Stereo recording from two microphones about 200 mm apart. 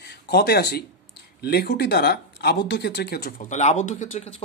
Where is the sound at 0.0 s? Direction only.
50° left (ahead or behind).